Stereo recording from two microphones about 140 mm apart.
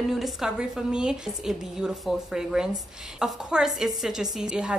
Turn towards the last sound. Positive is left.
turn(degrees=-5)  # may be behind; listen again after turning